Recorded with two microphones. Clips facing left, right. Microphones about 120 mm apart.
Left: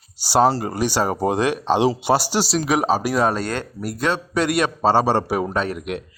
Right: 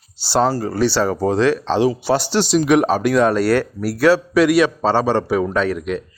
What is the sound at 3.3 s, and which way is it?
Speech, 20° left (ahead or behind).